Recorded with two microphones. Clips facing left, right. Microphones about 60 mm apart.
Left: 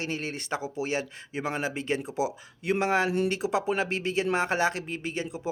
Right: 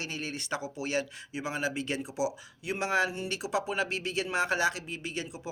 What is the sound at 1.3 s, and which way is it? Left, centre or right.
Speech, left.